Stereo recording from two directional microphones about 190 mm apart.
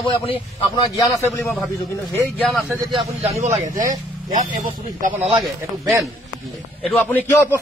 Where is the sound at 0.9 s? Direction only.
15° left (ahead or behind).